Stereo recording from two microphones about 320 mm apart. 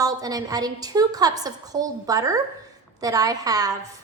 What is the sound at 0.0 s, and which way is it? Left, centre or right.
A woman's voice, centre.